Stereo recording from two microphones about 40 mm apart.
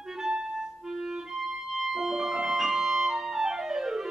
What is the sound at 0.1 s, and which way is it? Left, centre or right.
Clarinet, centre.